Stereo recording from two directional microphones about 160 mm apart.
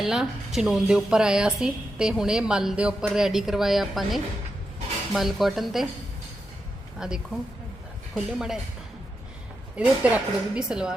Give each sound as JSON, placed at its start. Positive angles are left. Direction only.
{"t": 0.0, "sound": "a woman's voice", "side_deg": 0}
{"t": 7.0, "sound": "a woman's voice", "side_deg": -5}
{"t": 9.7, "sound": "a woman's voice", "side_deg": -10}